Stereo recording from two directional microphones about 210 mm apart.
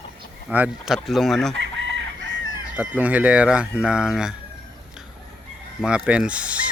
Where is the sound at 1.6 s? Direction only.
60° right (ahead or behind).